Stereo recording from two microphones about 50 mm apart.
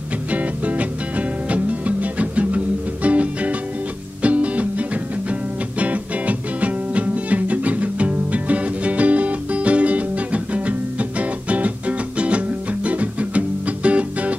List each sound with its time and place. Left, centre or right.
0.3 s music: right